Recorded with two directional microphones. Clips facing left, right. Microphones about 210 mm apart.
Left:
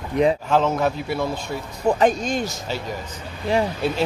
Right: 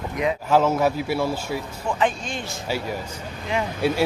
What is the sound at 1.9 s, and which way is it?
Speech, 40° left (ahead or behind).